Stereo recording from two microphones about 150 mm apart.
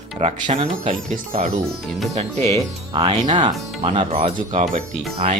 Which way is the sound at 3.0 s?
30° right (ahead or behind).